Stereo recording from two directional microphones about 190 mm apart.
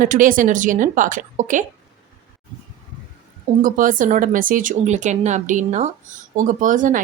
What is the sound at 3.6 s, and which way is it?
Speech, 45° right (ahead or behind).